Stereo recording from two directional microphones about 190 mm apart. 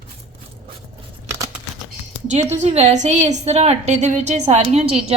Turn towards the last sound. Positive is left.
turn(degrees=-35)  # may be behind; listen again after turning